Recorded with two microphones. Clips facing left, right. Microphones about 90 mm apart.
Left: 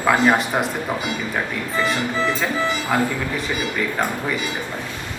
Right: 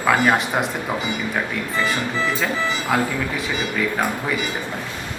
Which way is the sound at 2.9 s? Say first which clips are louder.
Even; centre (ahead or behind).